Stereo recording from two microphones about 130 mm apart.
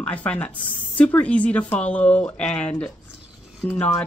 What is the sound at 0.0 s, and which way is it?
Speech, 10° left (ahead or behind).